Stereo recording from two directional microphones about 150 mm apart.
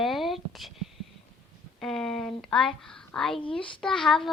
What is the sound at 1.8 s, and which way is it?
A woman's voice, 5° left (ahead or behind).